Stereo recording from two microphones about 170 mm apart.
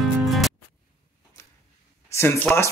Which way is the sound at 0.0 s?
Centre (ahead or behind).